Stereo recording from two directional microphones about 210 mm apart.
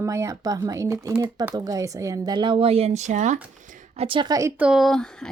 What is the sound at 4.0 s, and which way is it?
Speech, 25° right (ahead or behind).